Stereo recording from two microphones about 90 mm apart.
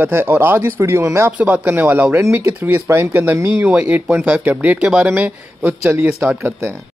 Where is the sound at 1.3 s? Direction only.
15° right (ahead or behind).